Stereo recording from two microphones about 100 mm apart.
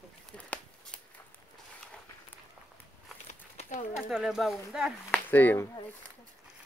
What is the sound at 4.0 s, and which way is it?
Speech, centre (ahead or behind).